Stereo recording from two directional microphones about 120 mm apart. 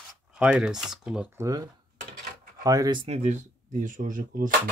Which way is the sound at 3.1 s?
70° right (ahead or behind).